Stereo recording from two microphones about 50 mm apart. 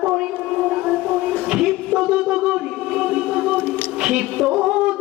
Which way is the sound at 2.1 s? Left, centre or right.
Centre.